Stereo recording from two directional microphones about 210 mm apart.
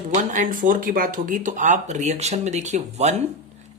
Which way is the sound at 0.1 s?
35° right (ahead or behind).